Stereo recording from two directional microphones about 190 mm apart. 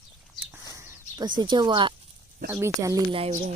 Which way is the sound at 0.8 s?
20° right (ahead or behind).